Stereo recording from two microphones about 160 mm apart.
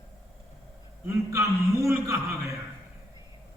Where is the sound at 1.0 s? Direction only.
20° right (ahead or behind).